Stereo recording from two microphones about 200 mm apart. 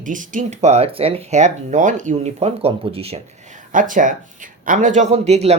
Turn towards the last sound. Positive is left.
turn(degrees=-35)  # may be behind; listen again after turning